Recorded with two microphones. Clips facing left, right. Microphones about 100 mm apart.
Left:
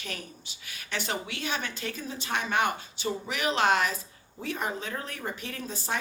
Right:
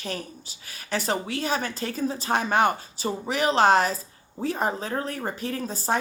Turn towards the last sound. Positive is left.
turn(degrees=-35)  # may be behind; listen again after turning